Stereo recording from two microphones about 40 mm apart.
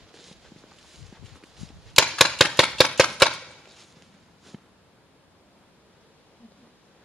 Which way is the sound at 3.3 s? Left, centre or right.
Centre.